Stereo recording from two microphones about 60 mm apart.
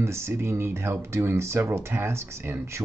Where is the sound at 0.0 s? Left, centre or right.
Right.